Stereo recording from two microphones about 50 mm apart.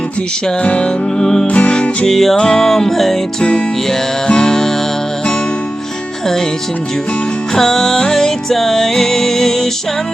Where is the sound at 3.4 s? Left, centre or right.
Left.